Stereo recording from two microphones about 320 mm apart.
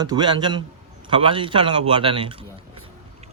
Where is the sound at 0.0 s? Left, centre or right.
Centre.